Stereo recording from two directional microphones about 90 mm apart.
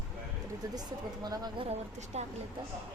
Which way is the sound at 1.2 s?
45° right (ahead or behind).